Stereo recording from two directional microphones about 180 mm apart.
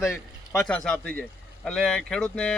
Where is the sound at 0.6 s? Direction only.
5° left (ahead or behind).